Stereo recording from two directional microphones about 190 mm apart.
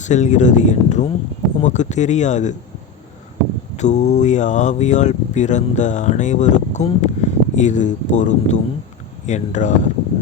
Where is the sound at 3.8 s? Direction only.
35° left (ahead or behind).